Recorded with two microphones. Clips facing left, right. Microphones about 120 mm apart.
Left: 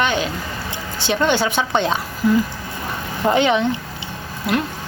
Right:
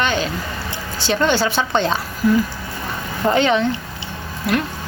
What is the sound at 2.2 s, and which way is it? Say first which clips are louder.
Speech: right 1 dB; 20° left (ahead or behind).